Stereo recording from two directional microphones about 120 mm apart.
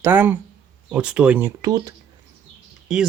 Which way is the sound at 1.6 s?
30° right (ahead or behind).